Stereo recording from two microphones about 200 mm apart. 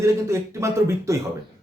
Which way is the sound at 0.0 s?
15° right (ahead or behind).